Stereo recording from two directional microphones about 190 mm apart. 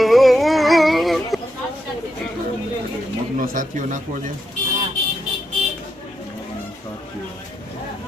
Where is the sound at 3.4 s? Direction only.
45° right (ahead or behind).